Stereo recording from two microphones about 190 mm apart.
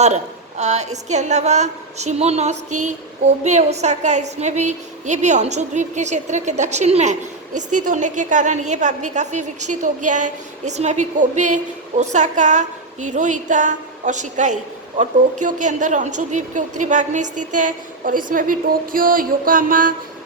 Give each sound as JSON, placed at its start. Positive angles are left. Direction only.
{"t": 0.0, "sound": "a woman's voice", "side_deg": -35}